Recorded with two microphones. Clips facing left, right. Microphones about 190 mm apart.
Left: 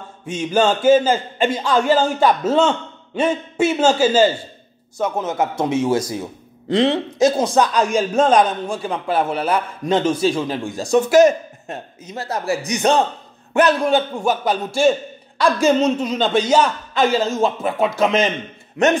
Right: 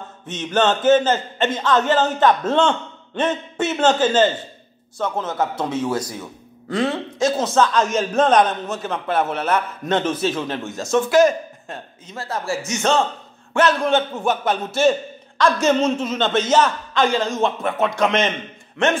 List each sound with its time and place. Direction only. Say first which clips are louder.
0.3 s a man's voice: left 2 dB; 10° left (ahead or behind)
10.0 s a man's voice: left 4 dB; 5° right (ahead or behind)
10.9 s a man's voice: left 3 dB; 20° left (ahead or behind)
13.8 s a man's voice: left 1 dB; 5° left (ahead or behind)